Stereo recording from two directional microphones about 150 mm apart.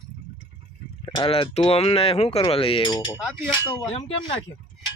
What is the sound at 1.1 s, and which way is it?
Speech, 30° left (ahead or behind).